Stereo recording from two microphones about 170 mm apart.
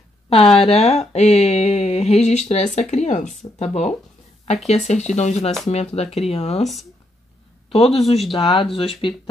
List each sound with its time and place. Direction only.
0.3 s speech: 35° left (ahead or behind)
7.7 s speech: 35° left (ahead or behind)